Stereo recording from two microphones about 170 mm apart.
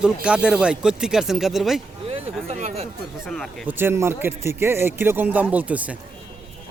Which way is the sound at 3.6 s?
15° right (ahead or behind).